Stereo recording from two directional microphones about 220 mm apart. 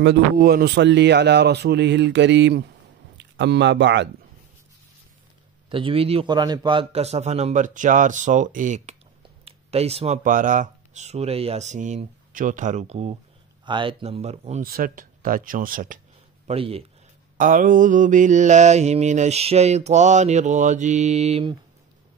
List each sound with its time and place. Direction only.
0.0 s speech: 50° right (ahead or behind)
5.7 s a man's voice: 25° right (ahead or behind); by 16.0 s 40° right (ahead or behind)
16.4 s speech: 25° right (ahead or behind)
17.4 s a man's voice: 35° right (ahead or behind)